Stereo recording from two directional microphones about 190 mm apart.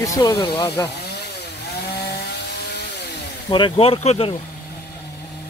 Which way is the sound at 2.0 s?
60° left (ahead or behind).